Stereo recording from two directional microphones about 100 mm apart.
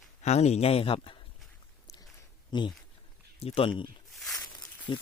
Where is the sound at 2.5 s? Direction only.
50° left (ahead or behind).